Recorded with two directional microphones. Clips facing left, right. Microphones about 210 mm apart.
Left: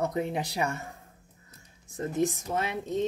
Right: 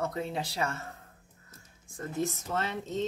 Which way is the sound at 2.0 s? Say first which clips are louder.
Left 5 dB; 15° left (ahead or behind).